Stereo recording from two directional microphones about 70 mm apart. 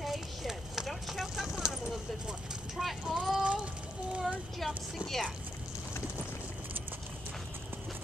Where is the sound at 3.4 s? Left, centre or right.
Centre.